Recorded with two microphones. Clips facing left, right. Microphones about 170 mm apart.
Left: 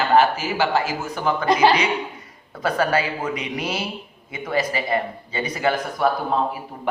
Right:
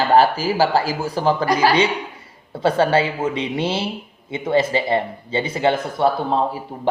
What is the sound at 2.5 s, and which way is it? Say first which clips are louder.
Speech: right 4 dB; 30° right (ahead or behind).